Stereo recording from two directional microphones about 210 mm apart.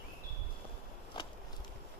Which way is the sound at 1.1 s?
25° left (ahead or behind).